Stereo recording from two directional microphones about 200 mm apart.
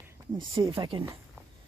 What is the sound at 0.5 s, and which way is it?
Speech, 25° right (ahead or behind).